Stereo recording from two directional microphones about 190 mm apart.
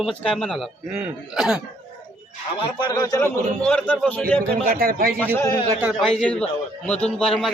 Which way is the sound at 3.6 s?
5° left (ahead or behind).